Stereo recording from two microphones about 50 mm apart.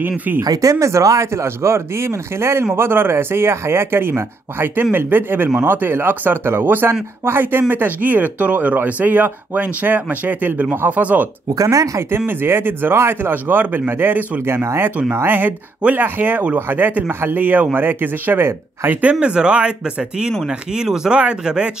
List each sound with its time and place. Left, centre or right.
0.6 s speech: right
7.6 s speech: right
12.3 s speech: right
12.9 s speech: right
13.3 s speech: right
14.4 s speech: right
15.2 s speech: right
17.1 s speech: right
17.4 s speech: right
19.1 s speech: centre